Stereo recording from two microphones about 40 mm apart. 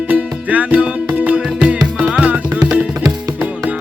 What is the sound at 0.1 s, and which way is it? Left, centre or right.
Music, right.